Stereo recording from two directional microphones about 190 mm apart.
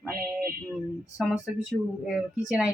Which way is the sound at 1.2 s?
5° right (ahead or behind).